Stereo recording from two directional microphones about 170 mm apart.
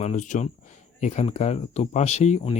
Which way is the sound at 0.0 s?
45° left (ahead or behind).